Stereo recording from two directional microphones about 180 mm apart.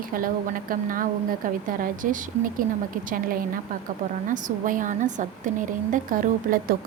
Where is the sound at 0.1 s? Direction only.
50° right (ahead or behind).